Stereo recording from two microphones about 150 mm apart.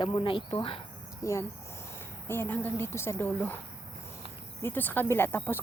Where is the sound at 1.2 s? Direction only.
20° left (ahead or behind).